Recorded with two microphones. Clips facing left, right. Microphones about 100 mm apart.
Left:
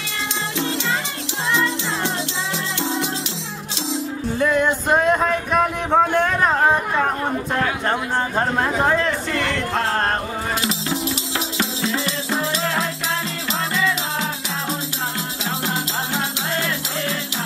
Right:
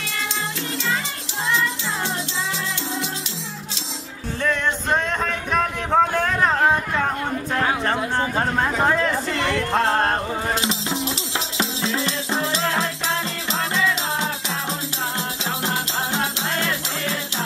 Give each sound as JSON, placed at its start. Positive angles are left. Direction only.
{"t": 4.4, "sound": "a sound", "side_deg": 10}
{"t": 7.8, "sound": "speech", "side_deg": 0}
{"t": 10.9, "sound": "music", "side_deg": -25}